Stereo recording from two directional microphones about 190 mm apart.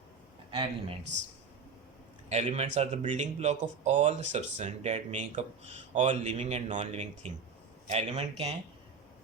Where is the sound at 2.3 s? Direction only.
35° right (ahead or behind).